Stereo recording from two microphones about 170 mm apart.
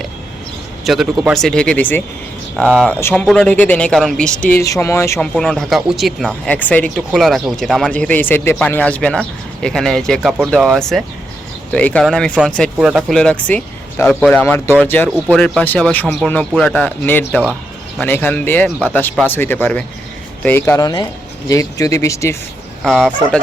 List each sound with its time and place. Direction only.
0.9 s speech: centre (ahead or behind)
4.6 s speech: 20° left (ahead or behind)
5.3 s speech: 5° left (ahead or behind)
22.8 s speech: 5° left (ahead or behind)